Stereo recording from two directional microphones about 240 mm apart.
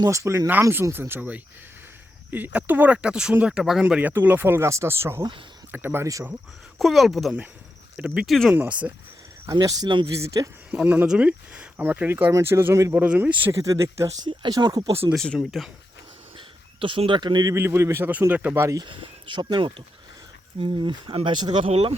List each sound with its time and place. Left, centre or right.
0.0 s speech: centre
6.7 s speech: centre; by 15.1 s right
15.1 s speech: centre
16.4 s speech: right